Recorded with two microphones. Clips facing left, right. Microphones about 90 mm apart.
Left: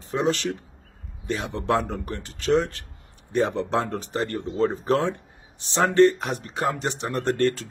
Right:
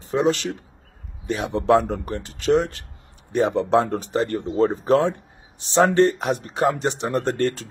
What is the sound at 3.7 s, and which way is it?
Speech, 20° right (ahead or behind).